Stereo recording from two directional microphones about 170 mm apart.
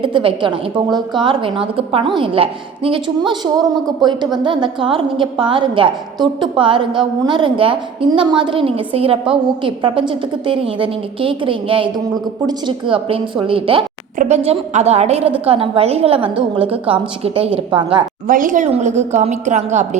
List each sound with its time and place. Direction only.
0.0 s a woman's voice: 30° right (ahead or behind)
18.3 s a woman's voice: 55° right (ahead or behind)